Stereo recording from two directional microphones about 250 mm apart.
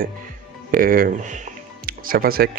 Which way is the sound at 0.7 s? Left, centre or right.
Right.